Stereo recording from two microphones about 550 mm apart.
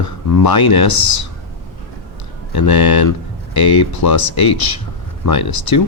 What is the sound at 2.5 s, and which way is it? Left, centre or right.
Speech, left.